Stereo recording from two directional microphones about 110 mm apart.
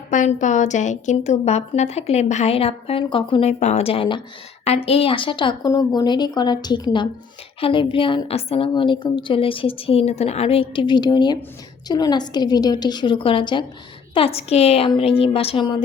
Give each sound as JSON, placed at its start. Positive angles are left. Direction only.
{"t": 0.1, "sound": "a woman's voice", "side_deg": 90}
{"t": 3.6, "sound": "a woman's voice", "side_deg": 80}
{"t": 4.6, "sound": "a woman's voice", "side_deg": 65}
{"t": 5.7, "sound": "a woman's voice", "side_deg": 35}
{"t": 8.7, "sound": "a woman's voice", "side_deg": 45}
{"t": 14.1, "sound": "a woman's voice", "side_deg": 60}
{"t": 14.8, "sound": "a woman's voice", "side_deg": 55}